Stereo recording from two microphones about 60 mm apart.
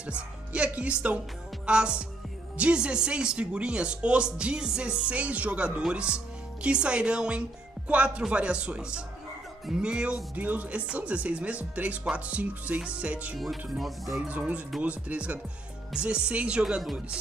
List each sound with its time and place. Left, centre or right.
0.0 s speech: centre
13.4 s speech: centre
14.8 s speech: right